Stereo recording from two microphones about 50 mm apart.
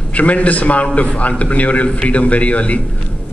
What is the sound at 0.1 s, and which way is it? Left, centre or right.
A man's voice, left.